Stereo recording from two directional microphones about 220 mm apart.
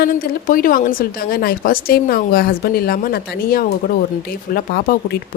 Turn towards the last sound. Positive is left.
turn(degrees=45)  # may be behind; listen again after turning